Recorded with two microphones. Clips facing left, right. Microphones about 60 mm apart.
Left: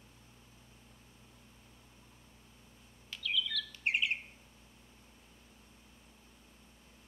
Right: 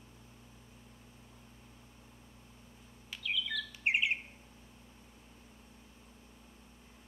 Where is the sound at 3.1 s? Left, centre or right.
Centre.